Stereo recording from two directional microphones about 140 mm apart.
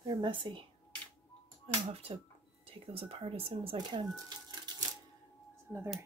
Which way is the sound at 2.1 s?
40° right (ahead or behind).